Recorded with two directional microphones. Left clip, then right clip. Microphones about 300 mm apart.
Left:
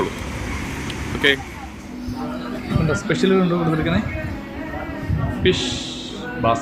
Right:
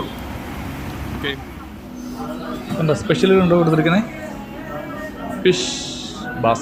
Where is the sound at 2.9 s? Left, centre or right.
Centre.